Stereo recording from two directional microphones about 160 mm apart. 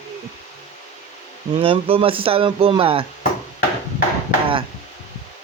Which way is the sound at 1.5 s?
35° right (ahead or behind).